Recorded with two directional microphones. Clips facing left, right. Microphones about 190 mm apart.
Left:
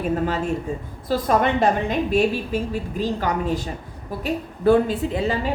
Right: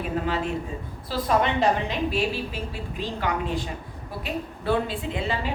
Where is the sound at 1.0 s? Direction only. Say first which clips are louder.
Left 4 dB; 50° left (ahead or behind).